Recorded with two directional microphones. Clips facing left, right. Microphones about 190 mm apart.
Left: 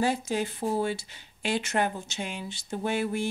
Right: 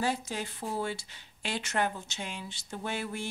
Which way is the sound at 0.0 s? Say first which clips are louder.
Left 5 dB; 15° left (ahead or behind).